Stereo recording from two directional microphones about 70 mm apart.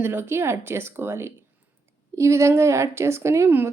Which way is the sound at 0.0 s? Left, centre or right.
Right.